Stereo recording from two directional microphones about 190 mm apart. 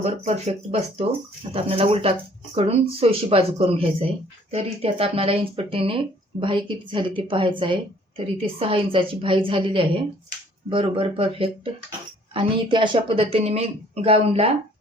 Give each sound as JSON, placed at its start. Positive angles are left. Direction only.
{"t": 0.0, "sound": "a woman's voice", "side_deg": -35}